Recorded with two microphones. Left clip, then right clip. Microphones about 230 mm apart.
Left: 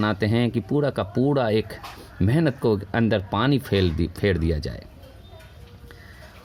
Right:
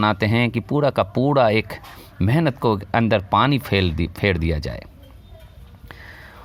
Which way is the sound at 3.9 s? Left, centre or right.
Right.